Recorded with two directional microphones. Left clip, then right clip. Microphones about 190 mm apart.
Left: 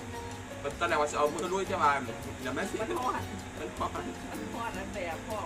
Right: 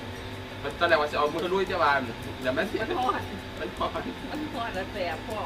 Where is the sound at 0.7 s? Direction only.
10° right (ahead or behind).